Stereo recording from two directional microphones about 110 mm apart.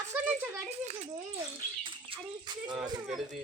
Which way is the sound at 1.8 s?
45° right (ahead or behind).